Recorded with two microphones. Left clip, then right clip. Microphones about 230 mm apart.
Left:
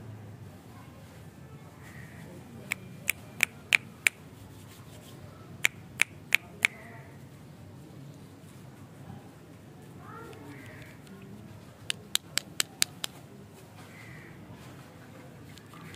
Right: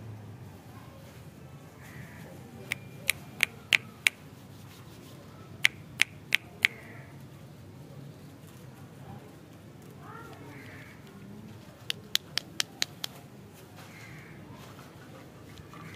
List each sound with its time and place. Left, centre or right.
2.7 s a sound: centre
5.6 s finger snapping: left
11.9 s hands: centre